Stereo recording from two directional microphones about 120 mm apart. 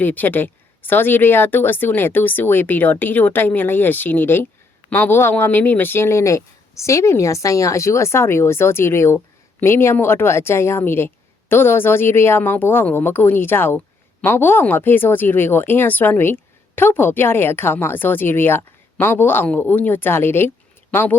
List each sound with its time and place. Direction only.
0.0 s a woman's voice: 15° left (ahead or behind)